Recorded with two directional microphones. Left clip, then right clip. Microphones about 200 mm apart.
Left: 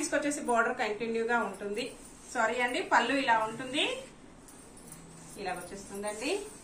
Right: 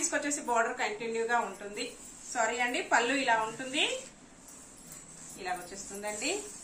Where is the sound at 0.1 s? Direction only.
Centre (ahead or behind).